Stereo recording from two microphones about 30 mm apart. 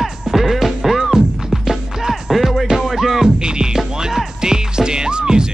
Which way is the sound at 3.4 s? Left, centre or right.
Right.